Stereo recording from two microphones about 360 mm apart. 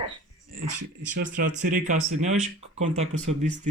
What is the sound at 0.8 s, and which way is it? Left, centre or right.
Speech, right.